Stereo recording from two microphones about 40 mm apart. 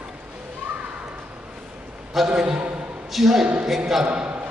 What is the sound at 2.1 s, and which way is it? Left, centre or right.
Speech, centre.